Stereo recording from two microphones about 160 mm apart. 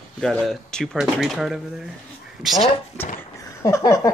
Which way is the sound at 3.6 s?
20° left (ahead or behind).